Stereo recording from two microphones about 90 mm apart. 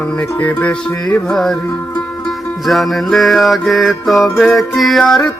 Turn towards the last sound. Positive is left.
turn(degrees=5)  # may be behind; listen again after turning